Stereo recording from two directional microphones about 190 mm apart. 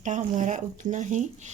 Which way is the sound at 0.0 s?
40° right (ahead or behind).